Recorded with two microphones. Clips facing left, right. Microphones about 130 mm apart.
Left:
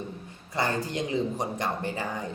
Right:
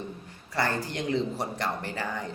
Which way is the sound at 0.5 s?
20° left (ahead or behind).